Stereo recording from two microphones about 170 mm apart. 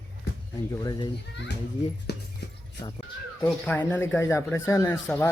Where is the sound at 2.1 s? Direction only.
75° left (ahead or behind).